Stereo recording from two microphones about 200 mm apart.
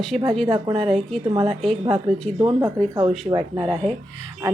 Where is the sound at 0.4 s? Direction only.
20° right (ahead or behind).